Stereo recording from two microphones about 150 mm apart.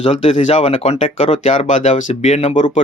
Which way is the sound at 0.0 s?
40° left (ahead or behind).